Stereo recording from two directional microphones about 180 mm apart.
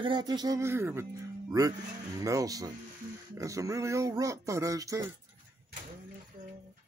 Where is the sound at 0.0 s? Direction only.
25° right (ahead or behind).